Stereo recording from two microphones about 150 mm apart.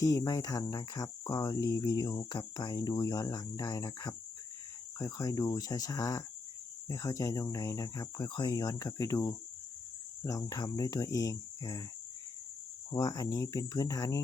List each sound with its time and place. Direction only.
0.0 s speech: 20° left (ahead or behind)
12.9 s speech: 25° left (ahead or behind)